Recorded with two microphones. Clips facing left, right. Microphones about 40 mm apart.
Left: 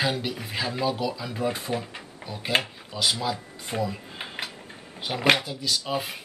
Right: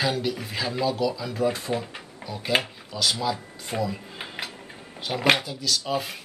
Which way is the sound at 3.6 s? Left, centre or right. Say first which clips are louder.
Right 1 dB; centre.